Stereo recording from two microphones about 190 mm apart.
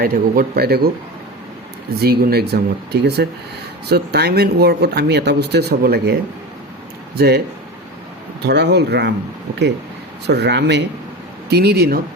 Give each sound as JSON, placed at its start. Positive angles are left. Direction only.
{"t": 0.0, "sound": "speech", "side_deg": -50}
{"t": 2.0, "sound": "speech", "side_deg": -55}
{"t": 7.2, "sound": "speech", "side_deg": -55}
{"t": 10.2, "sound": "speech", "side_deg": -65}